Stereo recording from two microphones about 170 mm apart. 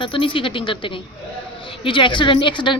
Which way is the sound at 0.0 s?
30° left (ahead or behind).